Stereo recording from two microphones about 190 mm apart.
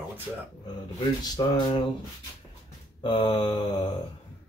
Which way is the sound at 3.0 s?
25° left (ahead or behind).